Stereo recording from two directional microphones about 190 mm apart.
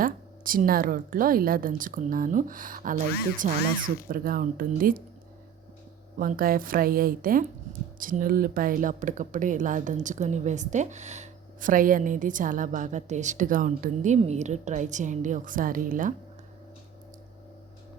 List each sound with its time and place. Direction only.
0.0 s speech: 45° right (ahead or behind)
6.1 s speech: 50° right (ahead or behind)